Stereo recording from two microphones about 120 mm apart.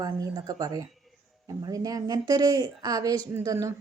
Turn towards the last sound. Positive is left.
turn(degrees=-30)  # may be behind; listen again after turning